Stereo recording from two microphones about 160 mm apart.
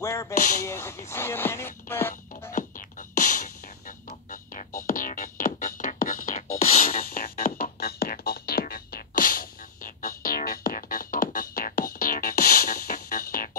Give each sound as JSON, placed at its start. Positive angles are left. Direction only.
{"t": 0.0, "sound": "a sound", "side_deg": 15}
{"t": 0.7, "sound": "speech", "side_deg": 15}
{"t": 2.5, "sound": "beatboxing", "side_deg": 55}
{"t": 4.3, "sound": "music", "side_deg": 60}